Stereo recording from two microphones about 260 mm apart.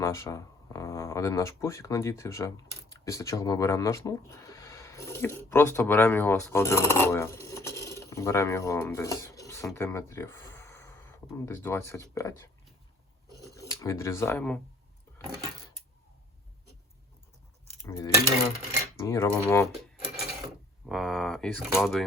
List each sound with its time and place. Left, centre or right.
0.0 s speech: centre
17.8 s cutlery: centre
20.8 s speech: centre